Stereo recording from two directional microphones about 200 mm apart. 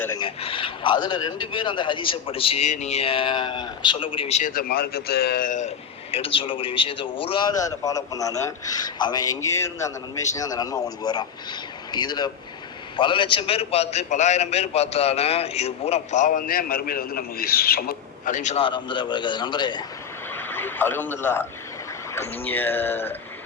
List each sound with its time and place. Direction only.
0.2 s a man's voice: 25° left (ahead or behind)
20.3 s a sound: 10° left (ahead or behind)
22.1 s a man's voice: 10° left (ahead or behind)